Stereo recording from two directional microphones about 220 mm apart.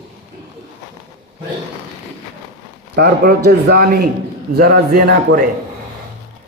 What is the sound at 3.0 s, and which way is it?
A man's voice, 45° right (ahead or behind).